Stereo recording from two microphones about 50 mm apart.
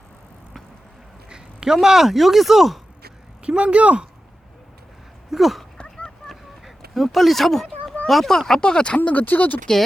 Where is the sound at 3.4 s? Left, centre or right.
Right.